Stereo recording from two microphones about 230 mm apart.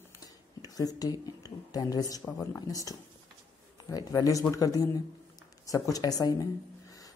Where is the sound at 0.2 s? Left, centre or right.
Centre.